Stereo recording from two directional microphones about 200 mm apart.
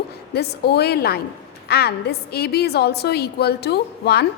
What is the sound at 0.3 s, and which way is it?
A woman's voice, 55° left (ahead or behind).